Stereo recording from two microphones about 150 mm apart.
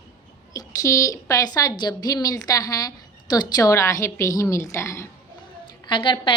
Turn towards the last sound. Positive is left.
turn(degrees=35)  # may be behind; listen again after turning